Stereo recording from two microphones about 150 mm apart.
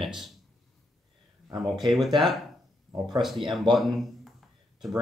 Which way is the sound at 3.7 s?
Centre (ahead or behind).